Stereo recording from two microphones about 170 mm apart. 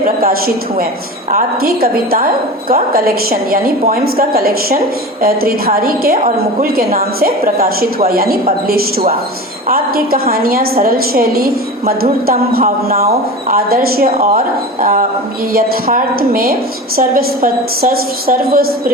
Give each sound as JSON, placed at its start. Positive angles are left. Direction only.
{"t": 0.2, "sound": "a woman's voice", "side_deg": -60}